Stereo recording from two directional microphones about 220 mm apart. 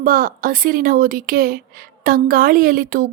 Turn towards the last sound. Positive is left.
turn(degrees=-40)  # may be behind; listen again after turning